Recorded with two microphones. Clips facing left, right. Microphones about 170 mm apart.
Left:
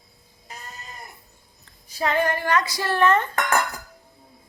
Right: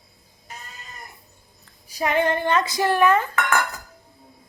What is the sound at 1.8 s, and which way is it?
Speech, 15° right (ahead or behind).